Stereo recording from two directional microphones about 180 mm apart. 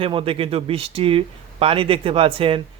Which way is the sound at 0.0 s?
30° right (ahead or behind).